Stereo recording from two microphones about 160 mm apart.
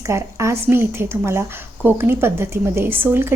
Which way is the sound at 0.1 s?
15° right (ahead or behind).